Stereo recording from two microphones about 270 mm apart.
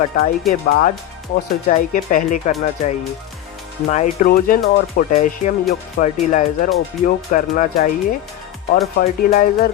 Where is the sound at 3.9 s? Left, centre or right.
Left.